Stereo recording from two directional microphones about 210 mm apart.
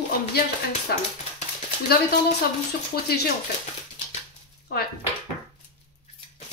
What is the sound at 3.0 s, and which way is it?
Speech, 50° left (ahead or behind).